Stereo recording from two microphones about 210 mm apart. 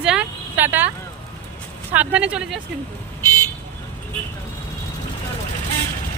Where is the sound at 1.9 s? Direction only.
5° right (ahead or behind).